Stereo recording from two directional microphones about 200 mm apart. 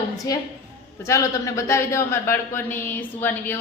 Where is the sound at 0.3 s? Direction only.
20° left (ahead or behind).